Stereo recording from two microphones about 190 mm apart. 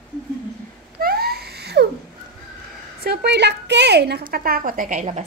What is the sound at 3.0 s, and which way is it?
A woman's voice, 55° right (ahead or behind).